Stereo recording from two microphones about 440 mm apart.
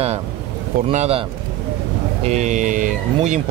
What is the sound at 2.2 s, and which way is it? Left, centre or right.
Speech, centre.